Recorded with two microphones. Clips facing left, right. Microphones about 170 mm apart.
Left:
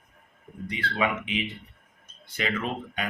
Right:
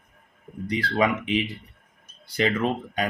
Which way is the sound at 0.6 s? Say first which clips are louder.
Right 5 dB; 35° right (ahead or behind).